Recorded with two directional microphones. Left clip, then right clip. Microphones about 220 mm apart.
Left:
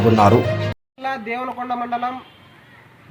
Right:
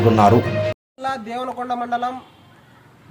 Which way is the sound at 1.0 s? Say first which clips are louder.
Even; 10° right (ahead or behind).